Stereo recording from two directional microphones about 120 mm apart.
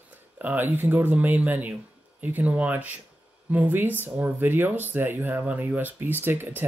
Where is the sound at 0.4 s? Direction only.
15° right (ahead or behind).